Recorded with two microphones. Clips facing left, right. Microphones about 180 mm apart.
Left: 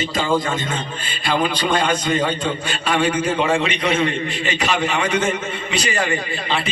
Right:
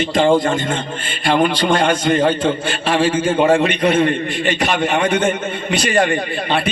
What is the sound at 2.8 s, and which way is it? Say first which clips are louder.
Speech: right 3 dB; 30° right (ahead or behind).